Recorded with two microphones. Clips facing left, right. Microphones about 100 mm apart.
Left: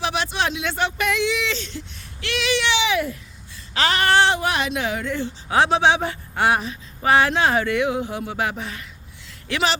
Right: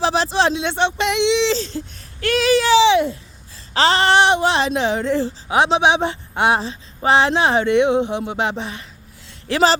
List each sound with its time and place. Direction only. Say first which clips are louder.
0.0 s speech: right 6 dB; 30° right (ahead or behind)
5.5 s speech: right 1 dB; 20° right (ahead or behind)
9.5 s speech: right 6 dB; 35° right (ahead or behind)